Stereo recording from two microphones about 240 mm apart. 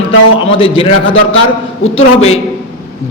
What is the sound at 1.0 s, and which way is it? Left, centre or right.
Speech, left.